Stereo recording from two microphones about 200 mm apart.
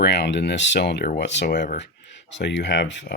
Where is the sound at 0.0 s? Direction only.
60° left (ahead or behind).